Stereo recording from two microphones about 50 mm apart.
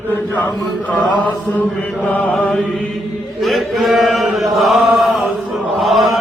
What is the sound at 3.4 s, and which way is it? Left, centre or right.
Chant, centre.